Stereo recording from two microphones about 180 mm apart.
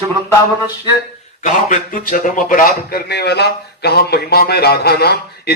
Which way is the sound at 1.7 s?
50° left (ahead or behind).